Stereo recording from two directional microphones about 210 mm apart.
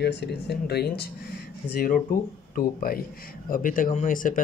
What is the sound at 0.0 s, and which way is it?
Speech, 50° left (ahead or behind).